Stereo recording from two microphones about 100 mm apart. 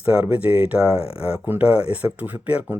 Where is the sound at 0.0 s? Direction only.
15° right (ahead or behind).